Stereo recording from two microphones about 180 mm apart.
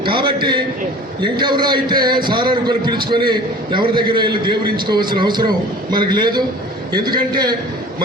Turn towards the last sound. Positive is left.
turn(degrees=-25)  # may be behind; listen again after turning